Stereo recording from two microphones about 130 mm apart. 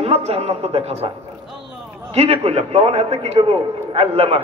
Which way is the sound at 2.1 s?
50° right (ahead or behind).